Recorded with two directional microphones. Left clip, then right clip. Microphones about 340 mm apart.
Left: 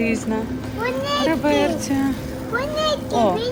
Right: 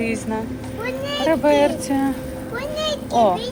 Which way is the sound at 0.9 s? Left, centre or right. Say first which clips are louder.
Left 2 dB; left.